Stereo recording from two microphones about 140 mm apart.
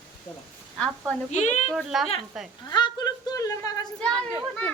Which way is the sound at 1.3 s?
55° left (ahead or behind).